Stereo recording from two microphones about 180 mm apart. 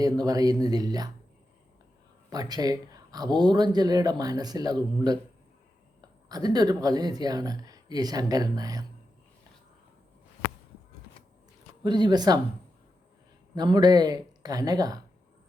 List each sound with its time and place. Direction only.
0.0 s speech: 20° right (ahead or behind)
2.3 s speech: 20° right (ahead or behind)
6.2 s speech: 20° right (ahead or behind)
11.8 s speech: 25° right (ahead or behind)
13.6 s speech: 25° right (ahead or behind)